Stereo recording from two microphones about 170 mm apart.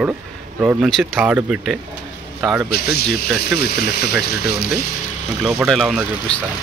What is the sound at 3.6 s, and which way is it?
Speech, 70° left (ahead or behind).